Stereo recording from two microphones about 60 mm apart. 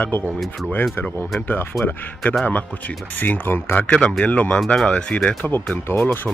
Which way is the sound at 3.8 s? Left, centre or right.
Centre.